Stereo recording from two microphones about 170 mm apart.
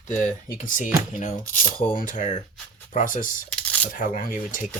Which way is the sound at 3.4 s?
5° left (ahead or behind).